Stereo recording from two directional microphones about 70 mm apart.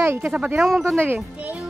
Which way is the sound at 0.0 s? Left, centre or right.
Right.